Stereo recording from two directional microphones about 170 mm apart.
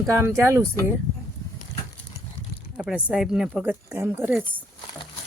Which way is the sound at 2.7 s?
5° right (ahead or behind).